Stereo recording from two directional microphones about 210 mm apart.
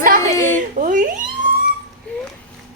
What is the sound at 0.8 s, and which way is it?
Speech, 40° right (ahead or behind).